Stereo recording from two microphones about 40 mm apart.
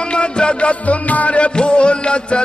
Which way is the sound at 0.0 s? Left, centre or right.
Left.